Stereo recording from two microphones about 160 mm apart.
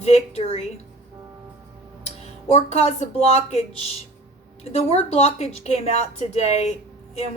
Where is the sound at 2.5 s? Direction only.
45° left (ahead or behind).